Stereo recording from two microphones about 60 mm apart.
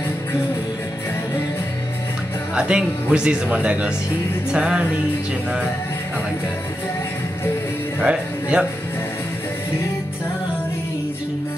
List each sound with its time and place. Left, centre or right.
2.5 s speech: centre
8.0 s speech: centre